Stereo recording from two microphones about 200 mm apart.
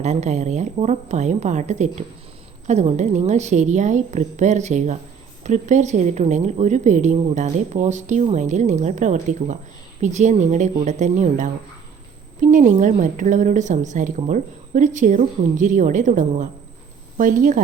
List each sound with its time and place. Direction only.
0.0 s a woman's voice: 35° right (ahead or behind)